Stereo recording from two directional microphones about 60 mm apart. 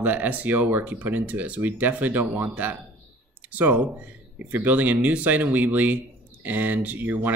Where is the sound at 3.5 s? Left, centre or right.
Right.